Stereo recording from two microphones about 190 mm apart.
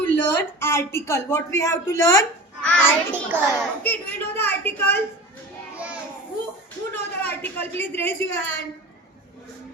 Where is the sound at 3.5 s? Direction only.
10° left (ahead or behind).